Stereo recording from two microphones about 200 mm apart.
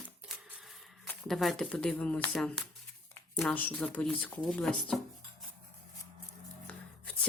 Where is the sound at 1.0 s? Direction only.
Centre (ahead or behind).